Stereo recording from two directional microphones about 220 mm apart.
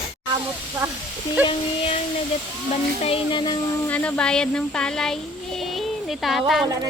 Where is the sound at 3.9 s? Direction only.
5° left (ahead or behind).